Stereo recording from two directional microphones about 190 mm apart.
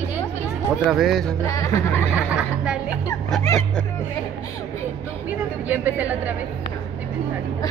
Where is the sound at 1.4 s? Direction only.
15° left (ahead or behind).